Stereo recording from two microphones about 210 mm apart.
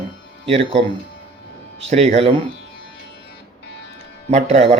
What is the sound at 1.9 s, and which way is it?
Speech, 30° right (ahead or behind).